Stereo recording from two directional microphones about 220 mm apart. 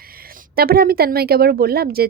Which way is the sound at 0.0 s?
40° right (ahead or behind).